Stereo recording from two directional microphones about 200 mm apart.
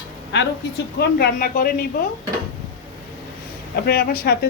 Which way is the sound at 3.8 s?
50° left (ahead or behind).